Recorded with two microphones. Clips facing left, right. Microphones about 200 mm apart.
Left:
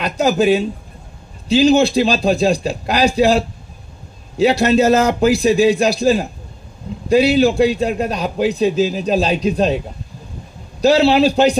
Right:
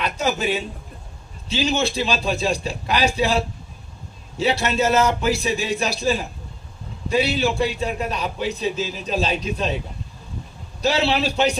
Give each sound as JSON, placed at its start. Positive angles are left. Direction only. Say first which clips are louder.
{"t": 0.0, "sound": "a man's voice", "louder": "left 8 dB", "side_deg": 40}
{"t": 10.8, "sound": "a man's voice", "louder": "left 9 dB", "side_deg": 35}